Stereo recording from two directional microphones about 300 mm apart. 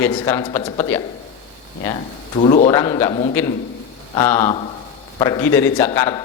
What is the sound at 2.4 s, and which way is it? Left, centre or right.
A woman's voice, centre.